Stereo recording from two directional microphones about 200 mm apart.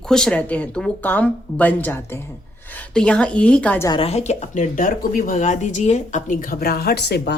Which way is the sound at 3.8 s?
25° left (ahead or behind).